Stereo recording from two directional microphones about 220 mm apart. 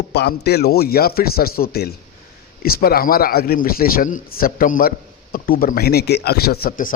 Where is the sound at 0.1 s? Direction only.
50° left (ahead or behind).